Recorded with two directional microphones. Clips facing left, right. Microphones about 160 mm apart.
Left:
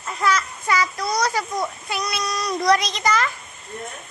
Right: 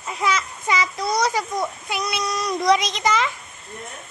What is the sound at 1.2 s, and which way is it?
A child's voice, 15° right (ahead or behind).